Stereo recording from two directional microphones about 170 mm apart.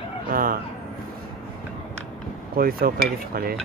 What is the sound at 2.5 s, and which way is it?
Speech, 60° right (ahead or behind).